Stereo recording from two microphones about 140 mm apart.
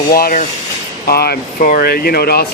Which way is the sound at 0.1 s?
90° left.